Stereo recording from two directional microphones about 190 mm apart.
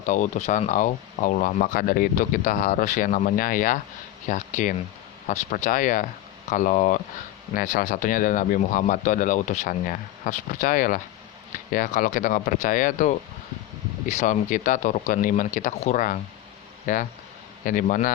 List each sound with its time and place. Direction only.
0.0 s speech: 40° left (ahead or behind)